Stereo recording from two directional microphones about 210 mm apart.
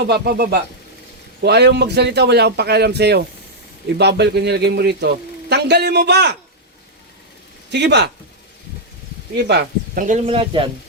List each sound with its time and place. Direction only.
0.1 s a man's voice: 50° right (ahead or behind)
7.7 s a man's voice: 55° right (ahead or behind)
9.3 s speech: 50° right (ahead or behind); by 10.7 s 25° right (ahead or behind)